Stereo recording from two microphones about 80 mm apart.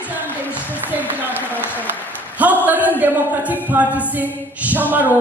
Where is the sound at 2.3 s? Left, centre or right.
Right.